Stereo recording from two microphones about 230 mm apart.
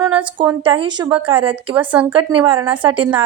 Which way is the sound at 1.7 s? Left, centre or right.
Centre.